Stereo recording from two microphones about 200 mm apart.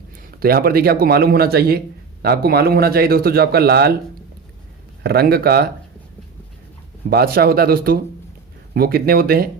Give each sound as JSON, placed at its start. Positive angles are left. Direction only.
{"t": 0.3, "sound": "a man's voice", "side_deg": -50}
{"t": 5.0, "sound": "a man's voice", "side_deg": -50}
{"t": 7.1, "sound": "a man's voice", "side_deg": -50}